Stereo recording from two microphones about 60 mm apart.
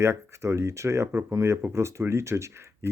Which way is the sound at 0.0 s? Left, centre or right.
Right.